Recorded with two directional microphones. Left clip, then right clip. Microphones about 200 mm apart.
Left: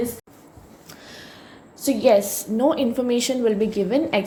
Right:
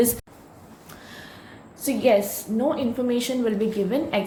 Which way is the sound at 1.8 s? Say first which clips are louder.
Left 3 dB; 20° left (ahead or behind).